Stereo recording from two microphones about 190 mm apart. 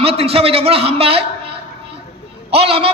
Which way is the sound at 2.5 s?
30° right (ahead or behind).